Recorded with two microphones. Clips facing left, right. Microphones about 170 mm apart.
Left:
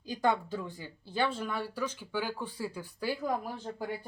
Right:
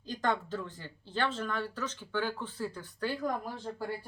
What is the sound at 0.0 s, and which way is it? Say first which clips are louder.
Speech: left 3 dB; 10° left (ahead or behind).